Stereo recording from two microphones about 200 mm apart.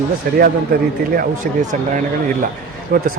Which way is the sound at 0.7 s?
50° right (ahead or behind).